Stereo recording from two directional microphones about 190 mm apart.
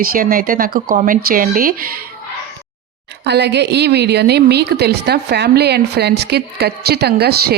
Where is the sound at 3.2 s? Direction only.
60° right (ahead or behind).